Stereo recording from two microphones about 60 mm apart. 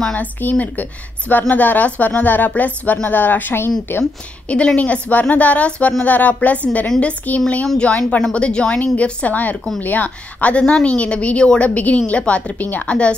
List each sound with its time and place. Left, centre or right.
0.1 s speech: left
4.5 s speech: left
7.6 s speech: centre